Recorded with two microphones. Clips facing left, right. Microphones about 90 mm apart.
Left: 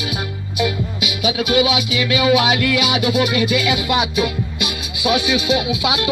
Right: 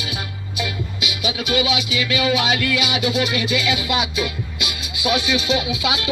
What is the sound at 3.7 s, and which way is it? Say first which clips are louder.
Music: left 4 dB; 20° left (ahead or behind).